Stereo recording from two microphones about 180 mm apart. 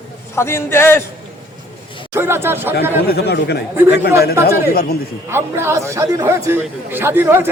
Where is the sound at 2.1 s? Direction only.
15° right (ahead or behind).